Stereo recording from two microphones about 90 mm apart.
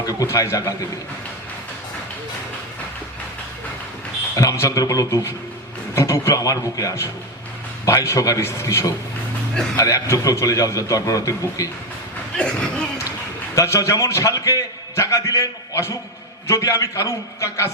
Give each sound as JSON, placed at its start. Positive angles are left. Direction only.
{"t": 0.0, "sound": "a man's voice", "side_deg": 40}
{"t": 4.4, "sound": "a man's voice", "side_deg": 35}
{"t": 12.4, "sound": "speech", "side_deg": 10}
{"t": 13.6, "sound": "a man's voice", "side_deg": 35}